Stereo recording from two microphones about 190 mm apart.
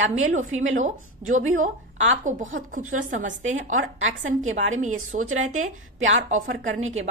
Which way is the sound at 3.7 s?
90° right.